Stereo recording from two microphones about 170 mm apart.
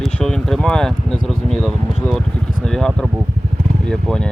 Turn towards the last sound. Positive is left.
turn(degrees=5)  # may be behind; listen again after turning